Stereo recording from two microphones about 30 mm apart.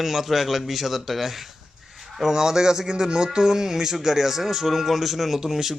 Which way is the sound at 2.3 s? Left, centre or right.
Centre.